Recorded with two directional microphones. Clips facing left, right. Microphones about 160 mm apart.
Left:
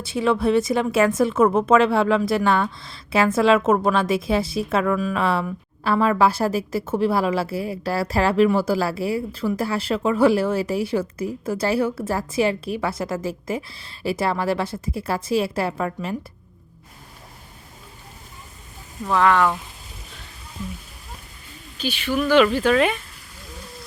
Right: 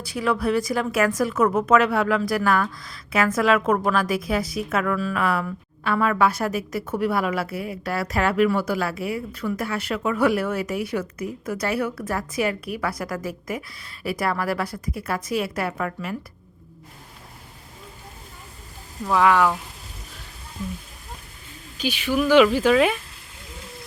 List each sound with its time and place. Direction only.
0.0 s speech: 25° left (ahead or behind)
19.0 s speech: 10° right (ahead or behind)
21.8 s speech: 10° right (ahead or behind)